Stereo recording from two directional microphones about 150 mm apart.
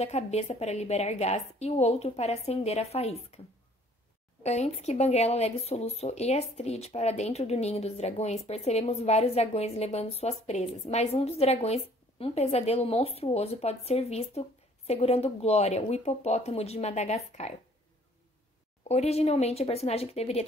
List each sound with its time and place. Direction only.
0.0 s speech: 45° left (ahead or behind)
4.4 s speech: 50° left (ahead or behind)
18.9 s speech: 45° left (ahead or behind)